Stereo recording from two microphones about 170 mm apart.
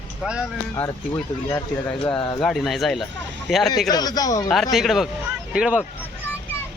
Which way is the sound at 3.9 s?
25° left (ahead or behind).